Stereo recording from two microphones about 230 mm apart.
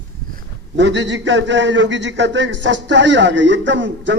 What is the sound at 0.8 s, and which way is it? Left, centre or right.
A man's voice, right.